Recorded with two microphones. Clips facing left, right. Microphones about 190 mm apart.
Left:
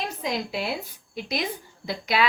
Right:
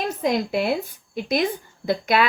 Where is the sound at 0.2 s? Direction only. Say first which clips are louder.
Right 8 dB; 55° right (ahead or behind).